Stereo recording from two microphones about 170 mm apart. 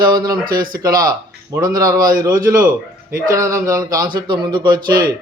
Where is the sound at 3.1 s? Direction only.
55° right (ahead or behind).